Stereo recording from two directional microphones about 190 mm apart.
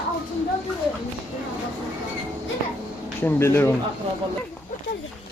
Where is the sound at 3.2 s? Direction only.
15° left (ahead or behind).